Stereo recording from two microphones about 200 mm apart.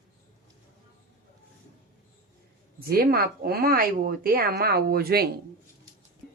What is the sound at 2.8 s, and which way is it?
Speech, 50° right (ahead or behind).